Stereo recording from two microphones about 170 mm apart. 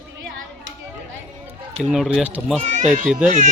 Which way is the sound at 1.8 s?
Centre (ahead or behind).